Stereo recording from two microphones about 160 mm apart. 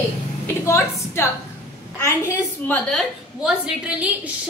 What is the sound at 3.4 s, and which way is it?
Speech, 5° right (ahead or behind).